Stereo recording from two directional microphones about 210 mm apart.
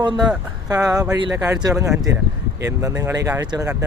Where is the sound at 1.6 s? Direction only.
15° right (ahead or behind).